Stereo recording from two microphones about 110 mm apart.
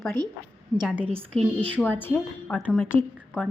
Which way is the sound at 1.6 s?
15° left (ahead or behind).